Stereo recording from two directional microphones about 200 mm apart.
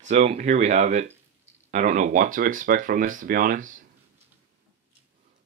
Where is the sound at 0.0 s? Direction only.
35° right (ahead or behind).